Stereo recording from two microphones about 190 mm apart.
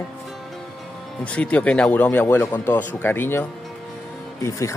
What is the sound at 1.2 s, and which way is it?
Speech, 5° left (ahead or behind).